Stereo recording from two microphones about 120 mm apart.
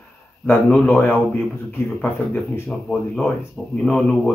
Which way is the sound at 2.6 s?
5° left (ahead or behind).